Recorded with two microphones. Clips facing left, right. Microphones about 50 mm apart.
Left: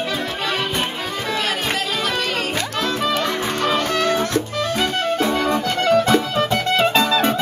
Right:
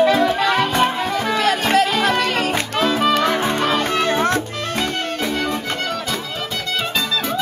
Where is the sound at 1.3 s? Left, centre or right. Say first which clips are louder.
Right 4 dB; right.